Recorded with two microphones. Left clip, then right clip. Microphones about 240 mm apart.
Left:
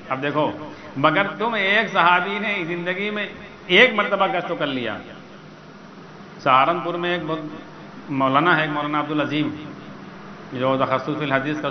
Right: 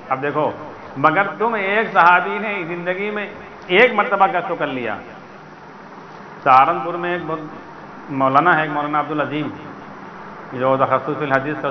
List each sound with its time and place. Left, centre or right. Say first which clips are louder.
0.1 s a man's voice: right 3 dB; left
6.4 s a man's voice: right 4 dB; left
10.5 s a man's voice: right 4 dB; left